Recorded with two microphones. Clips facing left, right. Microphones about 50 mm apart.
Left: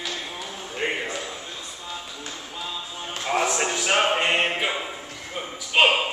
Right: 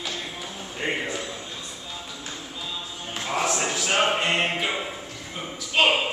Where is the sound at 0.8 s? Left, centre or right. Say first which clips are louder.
Left 1 dB; left.